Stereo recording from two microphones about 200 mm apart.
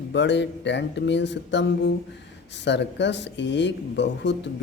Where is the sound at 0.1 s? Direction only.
60° left (ahead or behind).